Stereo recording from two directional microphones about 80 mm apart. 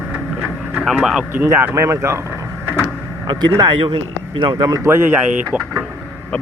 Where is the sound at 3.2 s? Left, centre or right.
Right.